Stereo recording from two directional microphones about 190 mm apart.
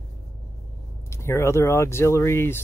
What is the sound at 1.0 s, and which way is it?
Speech, 15° left (ahead or behind).